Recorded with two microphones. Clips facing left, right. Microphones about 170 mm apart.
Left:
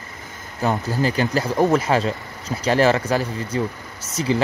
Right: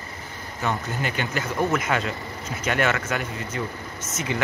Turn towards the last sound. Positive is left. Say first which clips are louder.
# left 7 dB
turn(degrees=35)  # may be behind; listen again after turning